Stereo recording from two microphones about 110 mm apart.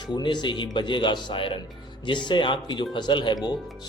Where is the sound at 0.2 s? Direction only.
45° left (ahead or behind).